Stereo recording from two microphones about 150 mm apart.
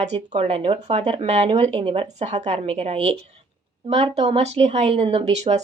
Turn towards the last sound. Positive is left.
turn(degrees=-50)  # may be behind; listen again after turning